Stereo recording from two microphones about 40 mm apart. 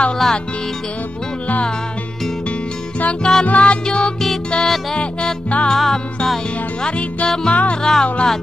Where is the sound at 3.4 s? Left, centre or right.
Left.